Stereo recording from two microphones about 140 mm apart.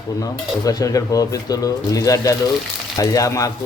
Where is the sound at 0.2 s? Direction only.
25° left (ahead or behind).